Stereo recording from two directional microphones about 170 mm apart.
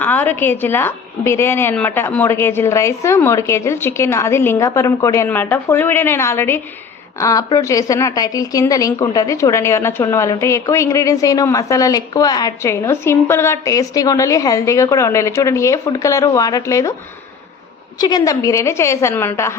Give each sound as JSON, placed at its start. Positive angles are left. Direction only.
{"t": 0.0, "sound": "a woman's voice", "side_deg": 10}
{"t": 18.0, "sound": "a woman's voice", "side_deg": 20}